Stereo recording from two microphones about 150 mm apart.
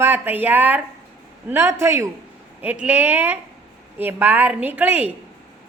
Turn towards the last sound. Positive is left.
turn(degrees=-10)  # may be behind; listen again after turning